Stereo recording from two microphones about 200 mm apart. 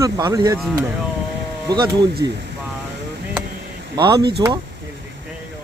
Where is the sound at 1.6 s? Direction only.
20° right (ahead or behind).